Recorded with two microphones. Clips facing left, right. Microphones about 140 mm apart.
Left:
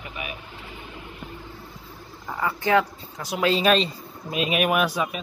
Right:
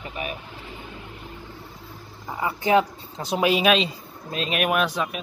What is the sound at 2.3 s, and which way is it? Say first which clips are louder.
Speech: right 1 dB; 20° right (ahead or behind).